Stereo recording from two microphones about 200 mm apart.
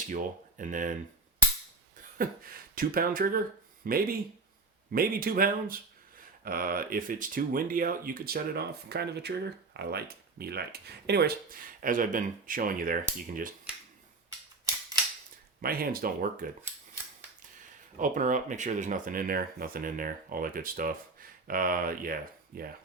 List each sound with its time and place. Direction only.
0.1 s speech: 40° right (ahead or behind)
2.1 s speech: 45° right (ahead or behind)
15.6 s speech: 50° right (ahead or behind)
17.9 s speech: 40° right (ahead or behind)